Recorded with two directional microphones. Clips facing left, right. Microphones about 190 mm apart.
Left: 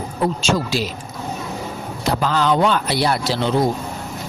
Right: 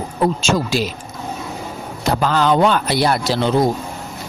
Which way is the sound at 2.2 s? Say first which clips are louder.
Right 3 dB; 50° right (ahead or behind).